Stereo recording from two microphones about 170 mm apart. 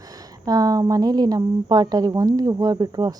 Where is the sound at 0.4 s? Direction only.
20° right (ahead or behind).